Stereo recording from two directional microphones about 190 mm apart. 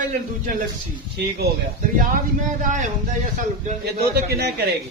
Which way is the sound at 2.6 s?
40° right (ahead or behind).